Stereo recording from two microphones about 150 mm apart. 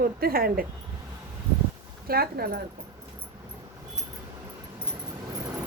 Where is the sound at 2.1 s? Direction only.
90° right.